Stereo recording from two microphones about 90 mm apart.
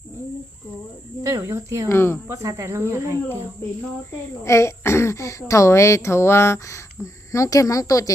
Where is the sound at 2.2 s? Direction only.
35° right (ahead or behind).